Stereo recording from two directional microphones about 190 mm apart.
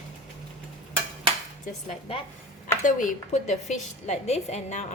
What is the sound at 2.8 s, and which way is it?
A woman's voice, 45° left (ahead or behind).